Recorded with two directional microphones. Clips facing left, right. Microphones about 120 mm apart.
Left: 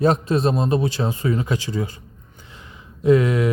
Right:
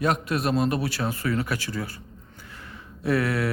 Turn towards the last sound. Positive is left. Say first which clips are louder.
# left 7 dB
turn(degrees=20)  # may be behind; listen again after turning